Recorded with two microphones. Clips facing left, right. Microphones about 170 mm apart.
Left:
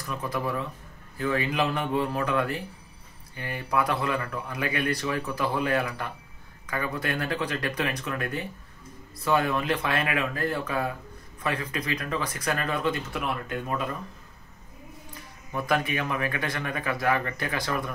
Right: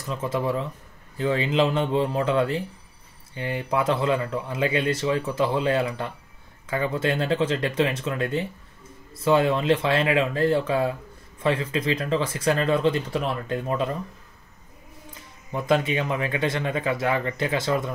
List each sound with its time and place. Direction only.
0.0 s speech: 25° right (ahead or behind)
15.5 s speech: 25° right (ahead or behind)